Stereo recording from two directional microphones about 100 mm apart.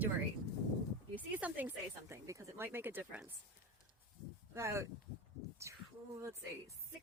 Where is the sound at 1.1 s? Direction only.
15° right (ahead or behind); by 2.6 s 30° right (ahead or behind).